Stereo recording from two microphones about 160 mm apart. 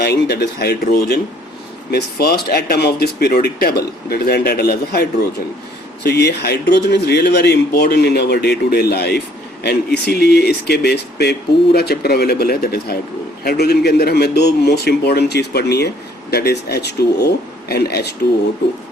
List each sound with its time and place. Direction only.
0.0 s speech: 90° left
6.0 s speech: 90° left
13.4 s speech: 85° left